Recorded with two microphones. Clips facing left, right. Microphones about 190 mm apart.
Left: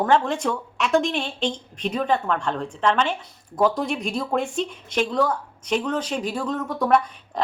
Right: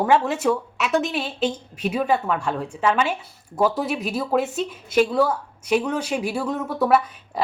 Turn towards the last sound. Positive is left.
turn(degrees=-5)  # may be behind; listen again after turning